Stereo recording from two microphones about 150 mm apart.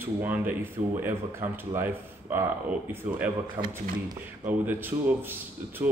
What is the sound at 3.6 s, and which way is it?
Speech, 35° right (ahead or behind).